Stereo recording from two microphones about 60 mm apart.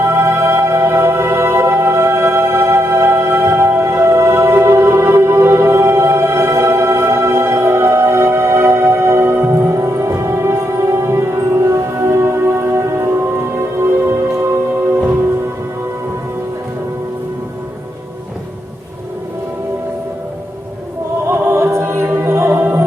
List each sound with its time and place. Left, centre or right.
0.1 s music: right
21.2 s music: right